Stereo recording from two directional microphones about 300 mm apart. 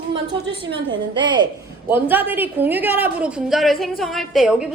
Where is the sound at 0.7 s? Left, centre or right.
Centre.